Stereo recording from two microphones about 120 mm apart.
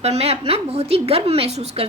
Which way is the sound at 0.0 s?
60° right (ahead or behind).